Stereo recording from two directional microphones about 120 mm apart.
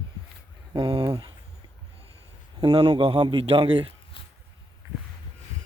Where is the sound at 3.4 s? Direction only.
55° right (ahead or behind).